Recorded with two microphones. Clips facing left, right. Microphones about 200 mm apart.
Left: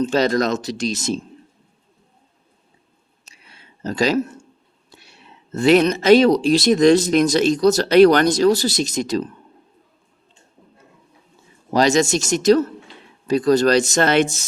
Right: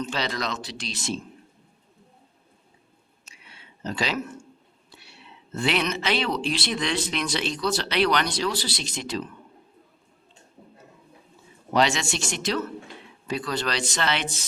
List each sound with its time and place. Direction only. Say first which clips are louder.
0.0 s speech: left 11 dB; 45° left (ahead or behind)
3.2 s a sound: left 2 dB; 40° left (ahead or behind)
4.9 s speech: left 2 dB; 45° left (ahead or behind)
11.7 s speech: left 7 dB; 40° left (ahead or behind)